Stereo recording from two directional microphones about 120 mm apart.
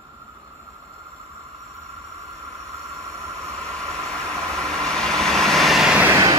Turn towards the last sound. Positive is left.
turn(degrees=-30)  # may be behind; listen again after turning